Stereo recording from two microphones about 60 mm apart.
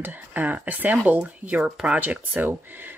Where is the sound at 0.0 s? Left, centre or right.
Right.